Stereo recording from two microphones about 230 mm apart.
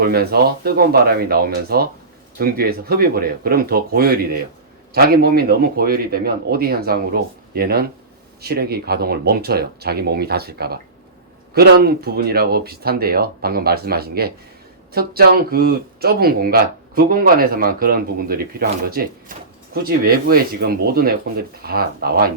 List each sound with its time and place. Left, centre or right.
0.0 s speech: right